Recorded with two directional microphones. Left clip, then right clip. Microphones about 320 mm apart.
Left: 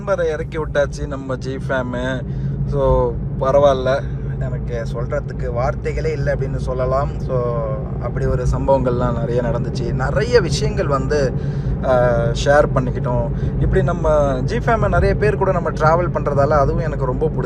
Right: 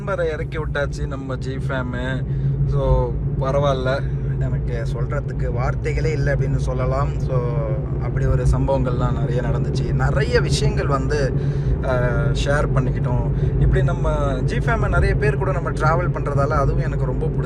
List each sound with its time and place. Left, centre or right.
0.1 s a man's voice: centre
5.1 s a man's voice: centre